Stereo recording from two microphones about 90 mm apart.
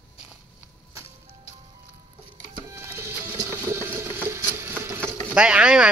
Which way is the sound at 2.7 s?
30° right (ahead or behind).